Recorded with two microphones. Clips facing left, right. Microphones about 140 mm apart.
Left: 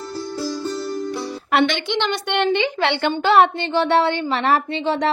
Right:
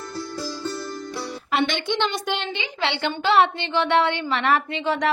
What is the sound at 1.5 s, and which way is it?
A woman's voice, 65° left (ahead or behind).